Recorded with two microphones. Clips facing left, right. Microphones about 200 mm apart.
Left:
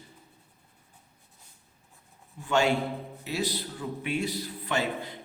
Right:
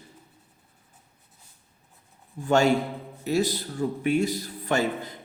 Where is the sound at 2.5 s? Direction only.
45° right (ahead or behind).